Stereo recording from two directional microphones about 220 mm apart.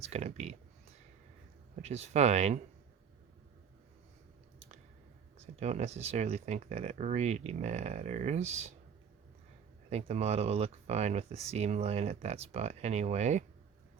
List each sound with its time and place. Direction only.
0.0 s speech: 30° right (ahead or behind)
1.8 s speech: 30° right (ahead or behind)
5.5 s speech: 30° right (ahead or behind)
9.9 s speech: 30° right (ahead or behind)